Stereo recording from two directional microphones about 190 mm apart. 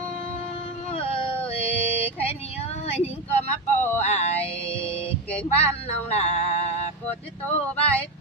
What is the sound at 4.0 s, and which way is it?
Music, 35° left (ahead or behind).